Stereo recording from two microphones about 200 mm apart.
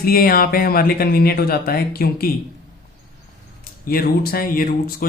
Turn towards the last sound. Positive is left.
turn(degrees=45)  # may be behind; listen again after turning